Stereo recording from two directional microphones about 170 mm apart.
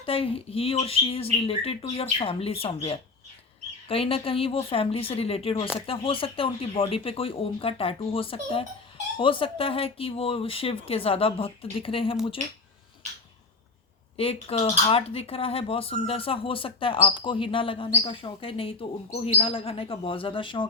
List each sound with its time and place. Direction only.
0.0 s speech: 35° left (ahead or behind)
14.4 s speech: 35° left (ahead or behind)